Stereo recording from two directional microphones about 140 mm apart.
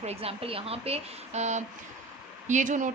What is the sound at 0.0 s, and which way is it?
A woman's voice, 45° right (ahead or behind).